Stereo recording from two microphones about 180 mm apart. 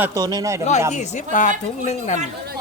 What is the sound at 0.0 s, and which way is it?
Speech, 20° right (ahead or behind).